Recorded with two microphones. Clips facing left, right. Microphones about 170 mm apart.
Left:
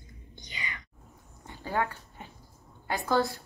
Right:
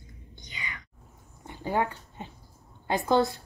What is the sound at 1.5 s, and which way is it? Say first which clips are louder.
Dog: right 3 dB; 20° right (ahead or behind).